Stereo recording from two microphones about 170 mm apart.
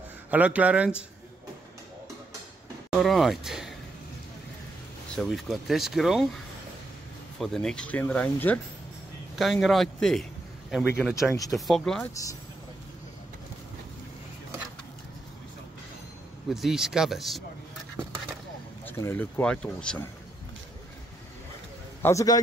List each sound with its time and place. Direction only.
0.3 s speech: 10° right (ahead or behind)
2.9 s speech: centre (ahead or behind)
5.1 s speech: 5° left (ahead or behind)
12.1 s a man's voice: 20° left (ahead or behind)
16.4 s speech: centre (ahead or behind)
18.9 s speech: 15° left (ahead or behind)
22.0 s a man's voice: 20° left (ahead or behind)